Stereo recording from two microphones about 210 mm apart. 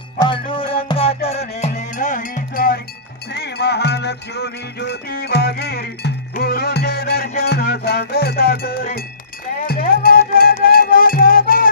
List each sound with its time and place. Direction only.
0.2 s music: 25° left (ahead or behind); by 11.7 s 40° left (ahead or behind)